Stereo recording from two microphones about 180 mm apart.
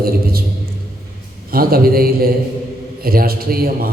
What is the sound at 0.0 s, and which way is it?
Speech, 55° right (ahead or behind).